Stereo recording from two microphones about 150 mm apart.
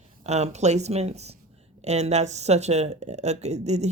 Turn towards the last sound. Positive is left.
turn(degrees=-50)  # may be behind; listen again after turning